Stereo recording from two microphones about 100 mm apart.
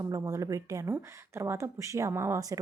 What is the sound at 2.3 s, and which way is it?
Speech, 35° right (ahead or behind).